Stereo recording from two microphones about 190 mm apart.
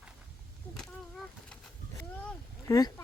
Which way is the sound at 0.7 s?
Centre (ahead or behind).